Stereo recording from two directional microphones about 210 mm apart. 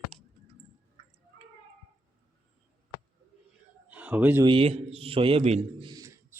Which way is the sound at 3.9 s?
5° right (ahead or behind).